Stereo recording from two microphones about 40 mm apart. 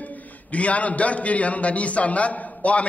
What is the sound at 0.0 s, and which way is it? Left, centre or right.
A man's voice, left.